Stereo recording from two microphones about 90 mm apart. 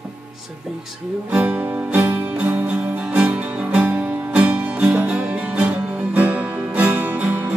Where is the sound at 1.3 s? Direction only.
15° right (ahead or behind).